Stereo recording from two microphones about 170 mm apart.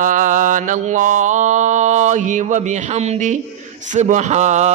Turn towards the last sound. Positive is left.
turn(degrees=-45)  # may be behind; listen again after turning